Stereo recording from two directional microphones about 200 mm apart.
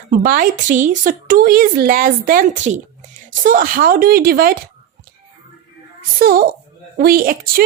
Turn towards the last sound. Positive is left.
turn(degrees=-45)  # may be behind; listen again after turning